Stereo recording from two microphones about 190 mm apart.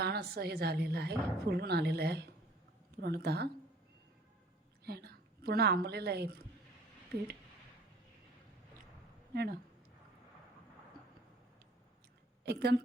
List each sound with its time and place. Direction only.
0.0 s a woman's voice: 55° right (ahead or behind)
4.9 s a woman's voice: 55° right (ahead or behind)
9.3 s a woman's voice: 55° right (ahead or behind)
12.5 s a woman's voice: 60° right (ahead or behind)